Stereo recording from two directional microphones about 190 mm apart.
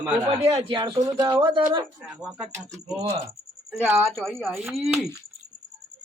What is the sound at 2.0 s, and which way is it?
Speech, centre (ahead or behind).